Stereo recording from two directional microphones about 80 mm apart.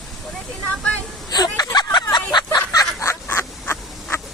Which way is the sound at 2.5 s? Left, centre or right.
Left.